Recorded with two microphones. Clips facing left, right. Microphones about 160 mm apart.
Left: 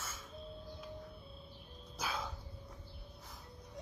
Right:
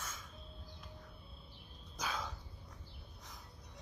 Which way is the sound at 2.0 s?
10° left (ahead or behind).